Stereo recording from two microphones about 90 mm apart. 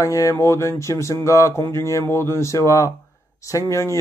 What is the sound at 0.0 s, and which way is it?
Speech, 40° left (ahead or behind).